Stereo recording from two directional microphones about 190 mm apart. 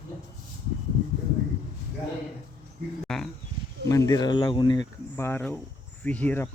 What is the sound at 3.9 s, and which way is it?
Speech, 20° left (ahead or behind).